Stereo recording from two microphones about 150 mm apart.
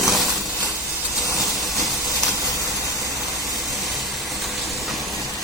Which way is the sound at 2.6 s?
20° right (ahead or behind).